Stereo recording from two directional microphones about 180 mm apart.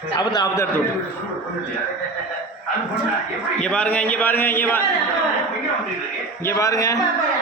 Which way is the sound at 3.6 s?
5° left (ahead or behind).